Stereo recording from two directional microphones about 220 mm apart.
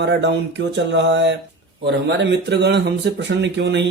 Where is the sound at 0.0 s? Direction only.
50° right (ahead or behind).